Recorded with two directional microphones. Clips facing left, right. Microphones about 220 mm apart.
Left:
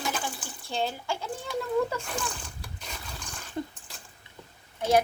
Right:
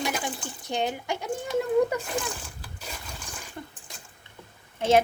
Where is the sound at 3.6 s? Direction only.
20° left (ahead or behind).